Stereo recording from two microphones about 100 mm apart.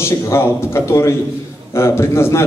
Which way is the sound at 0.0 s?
25° left (ahead or behind).